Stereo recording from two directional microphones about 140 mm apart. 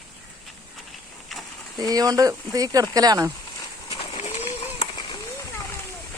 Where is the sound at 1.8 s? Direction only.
25° right (ahead or behind).